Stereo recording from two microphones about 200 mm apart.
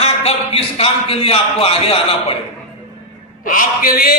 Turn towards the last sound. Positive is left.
turn(degrees=50)  # may be behind; listen again after turning